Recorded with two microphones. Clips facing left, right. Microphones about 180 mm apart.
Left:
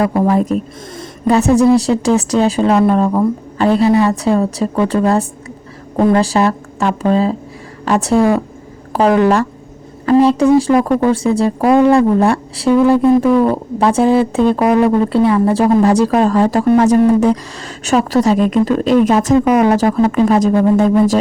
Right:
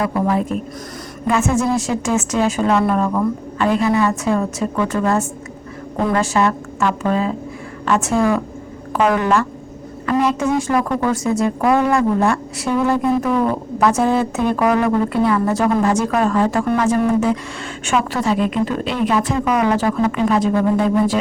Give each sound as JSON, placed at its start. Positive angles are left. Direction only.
{"t": 0.0, "sound": "a woman's voice", "side_deg": 35}